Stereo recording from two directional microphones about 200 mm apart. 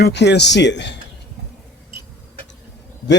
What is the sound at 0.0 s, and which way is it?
Speech, 60° left (ahead or behind).